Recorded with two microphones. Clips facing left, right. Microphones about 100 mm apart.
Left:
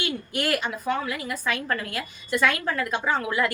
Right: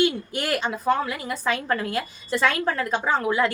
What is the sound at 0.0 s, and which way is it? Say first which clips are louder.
A woman's voice: right 5 dB; 30° right (ahead or behind).